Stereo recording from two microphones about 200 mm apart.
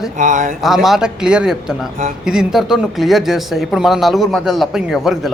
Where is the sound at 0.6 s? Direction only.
Centre (ahead or behind).